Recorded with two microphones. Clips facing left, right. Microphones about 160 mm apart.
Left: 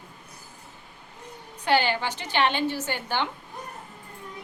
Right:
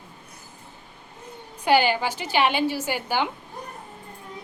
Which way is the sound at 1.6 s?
10° right (ahead or behind).